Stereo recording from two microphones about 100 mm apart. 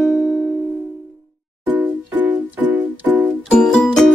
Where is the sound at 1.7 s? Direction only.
15° right (ahead or behind).